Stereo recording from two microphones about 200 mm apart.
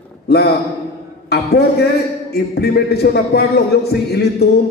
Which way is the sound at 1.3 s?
55° left (ahead or behind).